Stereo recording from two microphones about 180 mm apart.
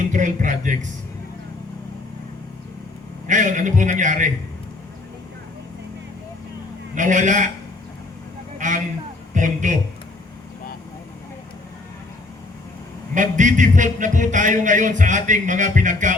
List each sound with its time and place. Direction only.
0.1 s music: 45° right (ahead or behind)
3.2 s music: 45° right (ahead or behind)
6.9 s music: 45° right (ahead or behind)
8.5 s a sound: 45° right (ahead or behind)
9.3 s a man's voice: 45° right (ahead or behind)
13.1 s music: 45° right (ahead or behind)